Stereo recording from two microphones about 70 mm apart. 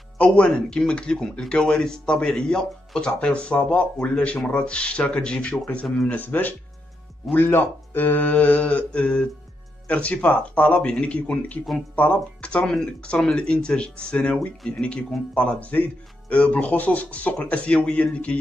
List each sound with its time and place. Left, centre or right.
0.2 s speech: centre